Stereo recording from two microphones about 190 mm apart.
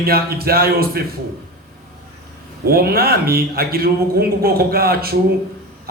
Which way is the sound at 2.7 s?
50° right (ahead or behind).